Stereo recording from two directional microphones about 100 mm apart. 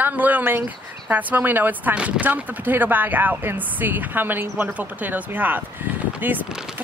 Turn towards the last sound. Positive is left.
turn(degrees=-5)  # may be behind; listen again after turning